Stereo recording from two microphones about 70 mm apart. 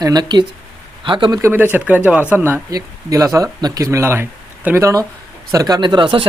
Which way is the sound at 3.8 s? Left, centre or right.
Right.